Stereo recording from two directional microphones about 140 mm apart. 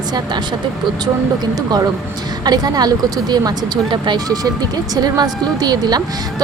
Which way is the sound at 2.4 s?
30° right (ahead or behind).